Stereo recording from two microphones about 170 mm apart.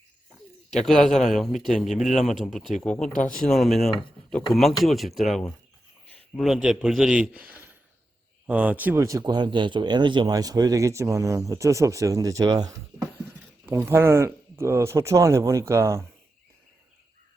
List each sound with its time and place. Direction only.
0.9 s speech: 5° left (ahead or behind); by 16.0 s 15° right (ahead or behind)